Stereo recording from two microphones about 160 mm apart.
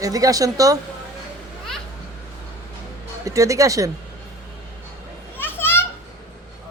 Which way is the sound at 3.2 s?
20° right (ahead or behind).